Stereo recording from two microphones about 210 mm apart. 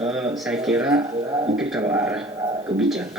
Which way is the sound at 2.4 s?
20° right (ahead or behind).